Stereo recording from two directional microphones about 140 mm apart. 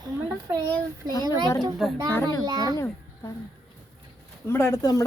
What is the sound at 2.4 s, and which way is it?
Speech, 30° right (ahead or behind).